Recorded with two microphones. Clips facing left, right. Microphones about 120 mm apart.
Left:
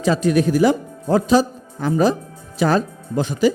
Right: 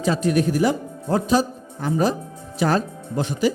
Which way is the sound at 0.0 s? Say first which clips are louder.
Left 3 dB; 90° left.